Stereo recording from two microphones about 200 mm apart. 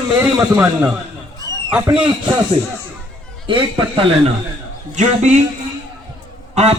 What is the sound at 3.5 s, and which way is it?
A man's voice, 25° right (ahead or behind).